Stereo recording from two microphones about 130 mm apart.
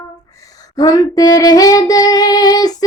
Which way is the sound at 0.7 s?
30° left (ahead or behind).